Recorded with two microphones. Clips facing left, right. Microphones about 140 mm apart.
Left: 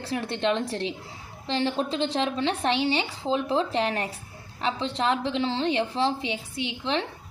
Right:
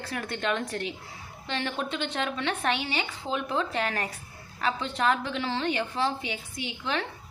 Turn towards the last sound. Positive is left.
turn(degrees=25)  # may be behind; listen again after turning